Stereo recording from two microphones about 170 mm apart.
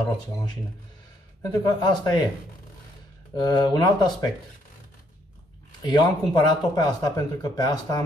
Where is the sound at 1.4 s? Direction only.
25° left (ahead or behind).